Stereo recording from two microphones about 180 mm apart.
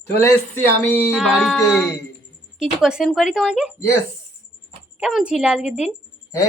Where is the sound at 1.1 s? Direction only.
5° right (ahead or behind).